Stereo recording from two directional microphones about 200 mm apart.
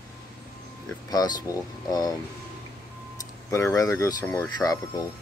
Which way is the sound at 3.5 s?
15° left (ahead or behind).